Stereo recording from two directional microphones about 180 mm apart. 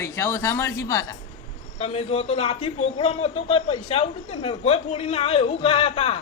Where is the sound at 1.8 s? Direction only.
35° left (ahead or behind).